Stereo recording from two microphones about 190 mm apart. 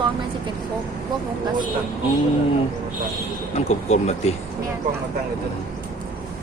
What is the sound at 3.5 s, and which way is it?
Speech, 35° left (ahead or behind).